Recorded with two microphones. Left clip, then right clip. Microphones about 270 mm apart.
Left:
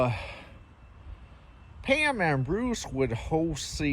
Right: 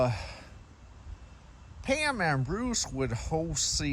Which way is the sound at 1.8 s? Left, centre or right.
Centre.